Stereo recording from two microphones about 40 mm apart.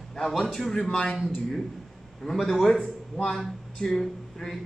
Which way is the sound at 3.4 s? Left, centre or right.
Centre.